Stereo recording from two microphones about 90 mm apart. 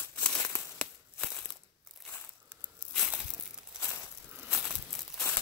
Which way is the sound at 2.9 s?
Centre (ahead or behind).